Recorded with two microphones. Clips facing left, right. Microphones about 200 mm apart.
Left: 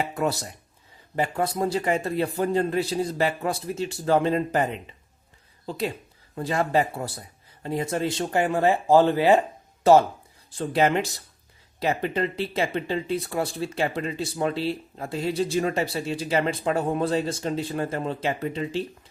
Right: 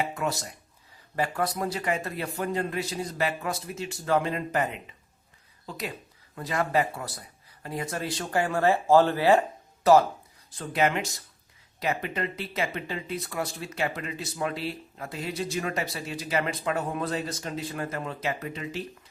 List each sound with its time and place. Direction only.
0.1 s speech: 35° left (ahead or behind)
1.1 s speech: 25° left (ahead or behind)